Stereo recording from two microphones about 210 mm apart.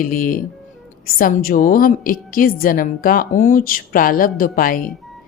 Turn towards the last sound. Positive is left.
turn(degrees=40)  # may be behind; listen again after turning